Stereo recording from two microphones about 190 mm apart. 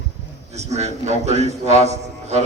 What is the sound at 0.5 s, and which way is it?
A man's voice, 35° right (ahead or behind).